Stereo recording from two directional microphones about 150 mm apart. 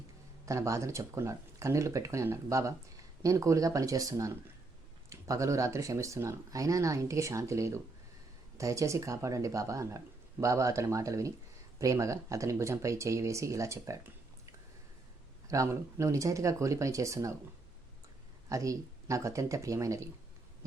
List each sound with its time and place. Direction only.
0.4 s speech: 20° right (ahead or behind)
15.4 s speech: 20° right (ahead or behind)
18.4 s speech: 20° right (ahead or behind)